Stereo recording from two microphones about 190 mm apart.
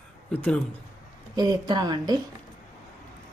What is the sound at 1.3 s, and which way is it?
Speech, 20° right (ahead or behind).